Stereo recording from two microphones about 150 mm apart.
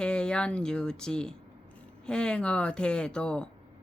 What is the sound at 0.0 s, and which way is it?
Speech, 5° left (ahead or behind).